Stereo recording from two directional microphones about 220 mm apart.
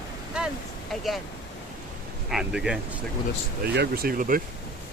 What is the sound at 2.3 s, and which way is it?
Speech, 5° right (ahead or behind).